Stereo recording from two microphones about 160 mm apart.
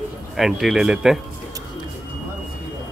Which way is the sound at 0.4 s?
Centre (ahead or behind).